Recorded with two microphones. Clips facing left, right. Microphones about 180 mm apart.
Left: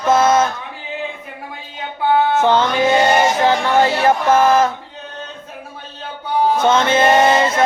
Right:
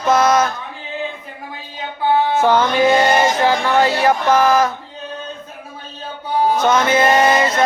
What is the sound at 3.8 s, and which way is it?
Music, 25° left (ahead or behind).